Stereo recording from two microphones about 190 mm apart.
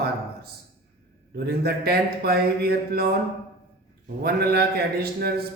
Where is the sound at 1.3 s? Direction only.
55° right (ahead or behind).